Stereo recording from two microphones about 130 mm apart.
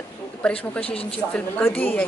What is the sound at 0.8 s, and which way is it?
Speech, 45° left (ahead or behind).